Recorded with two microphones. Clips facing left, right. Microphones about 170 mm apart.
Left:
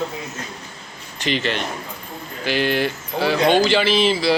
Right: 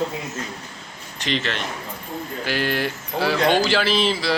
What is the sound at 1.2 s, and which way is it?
Speech, centre (ahead or behind).